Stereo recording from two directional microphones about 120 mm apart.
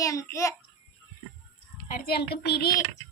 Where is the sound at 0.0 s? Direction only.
25° left (ahead or behind).